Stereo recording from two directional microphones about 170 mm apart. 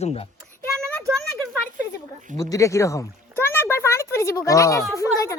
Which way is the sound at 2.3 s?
20° left (ahead or behind).